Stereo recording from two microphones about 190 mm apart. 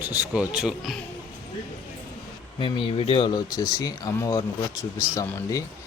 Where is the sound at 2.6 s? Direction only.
30° left (ahead or behind).